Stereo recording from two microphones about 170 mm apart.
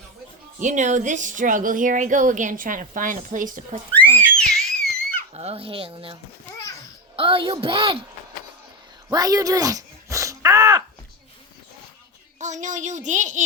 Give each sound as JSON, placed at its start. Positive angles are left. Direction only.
{"t": 0.6, "sound": "a woman's voice", "side_deg": -45}
{"t": 3.9, "sound": "a sound", "side_deg": 5}
{"t": 5.3, "sound": "speech", "side_deg": -35}
{"t": 7.2, "sound": "speech", "side_deg": -30}
{"t": 9.0, "sound": "a sound", "side_deg": -20}
{"t": 12.4, "sound": "a woman's voice", "side_deg": -45}